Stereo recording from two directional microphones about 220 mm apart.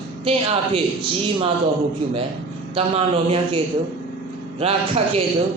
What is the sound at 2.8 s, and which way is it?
A woman's voice, 25° right (ahead or behind).